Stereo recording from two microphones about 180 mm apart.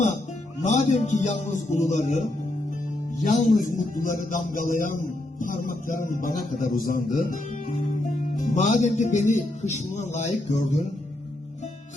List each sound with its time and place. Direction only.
0.6 s a man's voice: 40° left (ahead or behind)
3.2 s a man's voice: 45° left (ahead or behind)
7.7 s music: 45° left (ahead or behind)